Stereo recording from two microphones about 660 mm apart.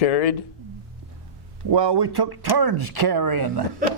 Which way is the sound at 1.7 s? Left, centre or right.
Right.